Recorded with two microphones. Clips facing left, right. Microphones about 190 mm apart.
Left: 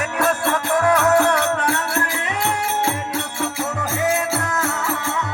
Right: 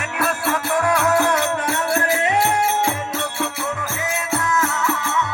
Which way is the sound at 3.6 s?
45° left (ahead or behind).